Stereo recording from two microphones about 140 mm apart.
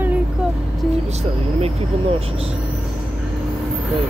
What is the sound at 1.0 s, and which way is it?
Speech, 50° right (ahead or behind).